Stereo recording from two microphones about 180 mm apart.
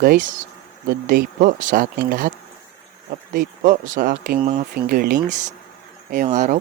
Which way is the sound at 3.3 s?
45° right (ahead or behind).